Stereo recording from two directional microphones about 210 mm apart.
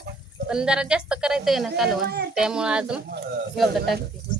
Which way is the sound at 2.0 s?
50° right (ahead or behind).